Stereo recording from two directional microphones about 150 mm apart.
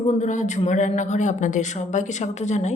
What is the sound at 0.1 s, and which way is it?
Speech, 55° left (ahead or behind).